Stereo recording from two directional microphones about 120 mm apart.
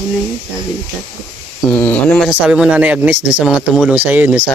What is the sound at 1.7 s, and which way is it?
Speech, 15° left (ahead or behind).